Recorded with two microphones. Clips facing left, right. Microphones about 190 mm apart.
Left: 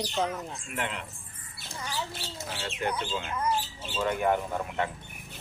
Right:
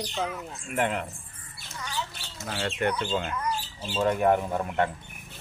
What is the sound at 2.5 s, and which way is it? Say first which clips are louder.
Speech: right 5 dB; 60° right (ahead or behind).